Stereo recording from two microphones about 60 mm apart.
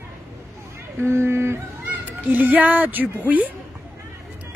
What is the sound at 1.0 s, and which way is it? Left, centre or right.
Speech, right.